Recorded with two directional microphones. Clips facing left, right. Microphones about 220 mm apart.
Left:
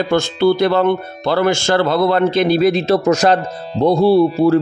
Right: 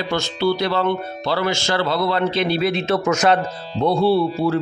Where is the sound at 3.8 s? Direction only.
40° left (ahead or behind).